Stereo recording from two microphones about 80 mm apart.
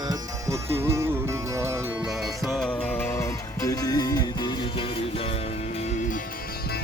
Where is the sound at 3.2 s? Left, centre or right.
Left.